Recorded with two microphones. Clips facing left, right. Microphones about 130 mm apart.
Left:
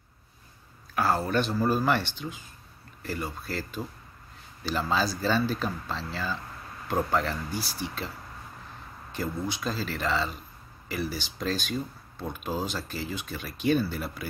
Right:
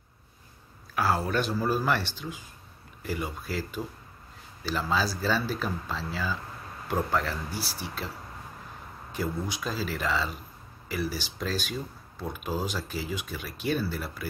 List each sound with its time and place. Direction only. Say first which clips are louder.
0.9 s speech: left 1 dB; 10° right (ahead or behind)
9.1 s speech: even; 5° right (ahead or behind)